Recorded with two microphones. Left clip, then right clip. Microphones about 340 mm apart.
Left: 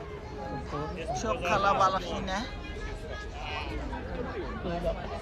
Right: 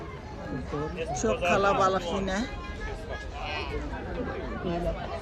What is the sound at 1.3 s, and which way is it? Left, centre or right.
Speech, centre.